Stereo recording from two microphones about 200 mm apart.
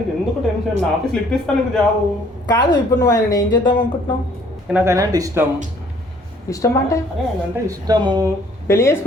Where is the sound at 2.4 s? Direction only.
20° left (ahead or behind).